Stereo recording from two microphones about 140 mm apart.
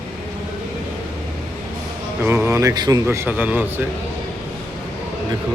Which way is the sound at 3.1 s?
15° right (ahead or behind).